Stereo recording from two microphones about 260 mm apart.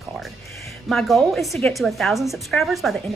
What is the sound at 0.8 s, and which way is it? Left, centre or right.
A woman's voice, centre.